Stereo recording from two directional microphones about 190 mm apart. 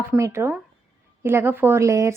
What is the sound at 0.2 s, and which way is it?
Speech, 15° right (ahead or behind).